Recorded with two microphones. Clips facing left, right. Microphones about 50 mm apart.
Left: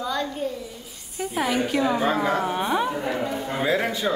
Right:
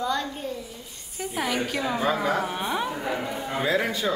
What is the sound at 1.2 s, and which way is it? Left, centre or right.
Speech, centre.